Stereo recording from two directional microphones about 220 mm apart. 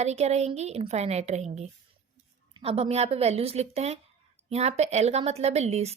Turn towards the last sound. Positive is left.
turn(degrees=-30)  # may be behind; listen again after turning